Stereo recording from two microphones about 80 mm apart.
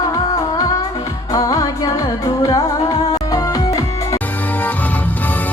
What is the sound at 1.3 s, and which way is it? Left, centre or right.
Music, left.